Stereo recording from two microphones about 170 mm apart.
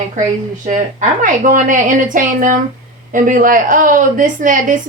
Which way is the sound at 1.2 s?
50° right (ahead or behind).